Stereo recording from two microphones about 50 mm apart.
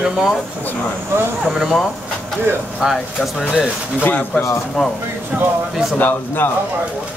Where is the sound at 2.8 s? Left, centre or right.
Centre.